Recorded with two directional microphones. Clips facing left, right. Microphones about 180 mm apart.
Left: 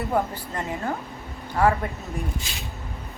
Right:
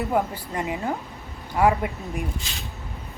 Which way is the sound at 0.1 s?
10° right (ahead or behind).